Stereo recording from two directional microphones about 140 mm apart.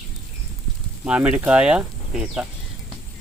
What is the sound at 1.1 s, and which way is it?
Speech, 10° right (ahead or behind).